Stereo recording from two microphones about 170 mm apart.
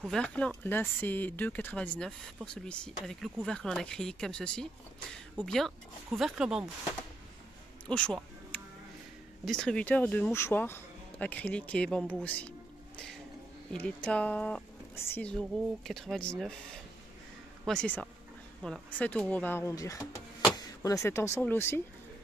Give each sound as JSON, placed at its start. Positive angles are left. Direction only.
{"t": 0.0, "sound": "speech", "side_deg": 5}
{"t": 7.8, "sound": "a sound", "side_deg": 5}
{"t": 9.4, "sound": "speech", "side_deg": 5}